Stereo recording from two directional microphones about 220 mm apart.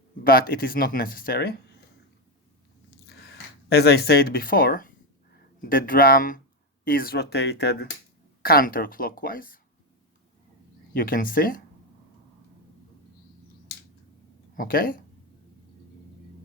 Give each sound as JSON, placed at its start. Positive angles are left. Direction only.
{"t": 0.3, "sound": "speech", "side_deg": 40}
{"t": 3.1, "sound": "speech", "side_deg": 50}
{"t": 10.9, "sound": "speech", "side_deg": 40}
{"t": 14.5, "sound": "speech", "side_deg": 40}